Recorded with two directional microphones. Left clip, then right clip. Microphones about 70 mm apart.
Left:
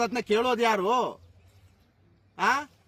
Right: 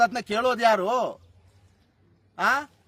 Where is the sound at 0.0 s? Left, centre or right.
Right.